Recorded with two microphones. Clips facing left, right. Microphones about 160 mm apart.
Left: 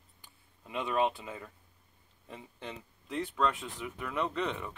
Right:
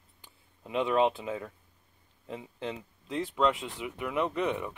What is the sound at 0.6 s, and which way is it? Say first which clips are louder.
Speech: right 5 dB; 20° right (ahead or behind).